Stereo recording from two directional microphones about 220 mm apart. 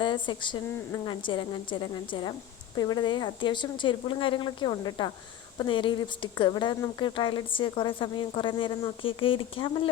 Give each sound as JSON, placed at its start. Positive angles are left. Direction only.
{"t": 0.0, "sound": "speech", "side_deg": 20}